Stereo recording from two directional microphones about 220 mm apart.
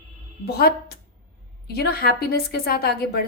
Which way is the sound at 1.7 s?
45° left (ahead or behind).